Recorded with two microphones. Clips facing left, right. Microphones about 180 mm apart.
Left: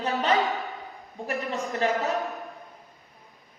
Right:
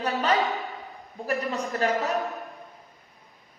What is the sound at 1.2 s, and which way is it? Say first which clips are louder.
Speech: right 2 dB; 40° right (ahead or behind).